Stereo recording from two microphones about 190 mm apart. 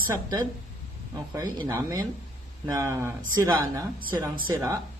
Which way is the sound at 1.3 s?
15° right (ahead or behind).